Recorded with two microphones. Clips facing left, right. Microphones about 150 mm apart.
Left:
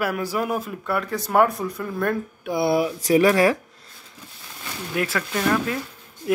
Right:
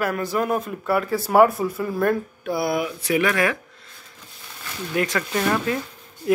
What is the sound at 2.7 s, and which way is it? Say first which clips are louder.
Speech: left 4 dB; 35° left (ahead or behind).